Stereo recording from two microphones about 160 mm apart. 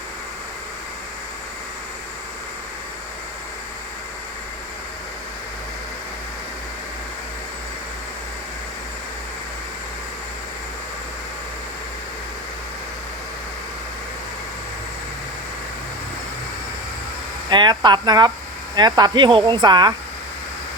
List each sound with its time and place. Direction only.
17.5 s speech: 25° right (ahead or behind)